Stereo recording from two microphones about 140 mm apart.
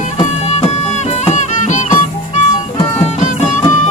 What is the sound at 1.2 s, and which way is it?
Music, 55° left (ahead or behind).